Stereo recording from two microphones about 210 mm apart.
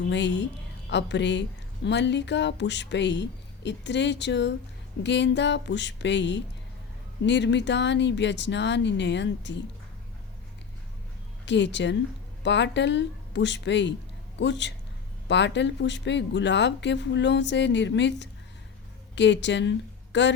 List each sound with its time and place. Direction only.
0.1 s speech: 55° left (ahead or behind)
11.4 s speech: 55° left (ahead or behind)